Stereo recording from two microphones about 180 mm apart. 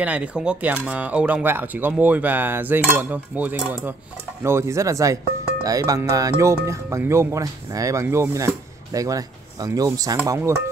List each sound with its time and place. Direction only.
0.0 s speech: 5° right (ahead or behind)